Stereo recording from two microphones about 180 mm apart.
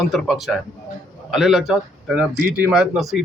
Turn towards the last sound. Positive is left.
turn(degrees=-5)  # may be behind; listen again after turning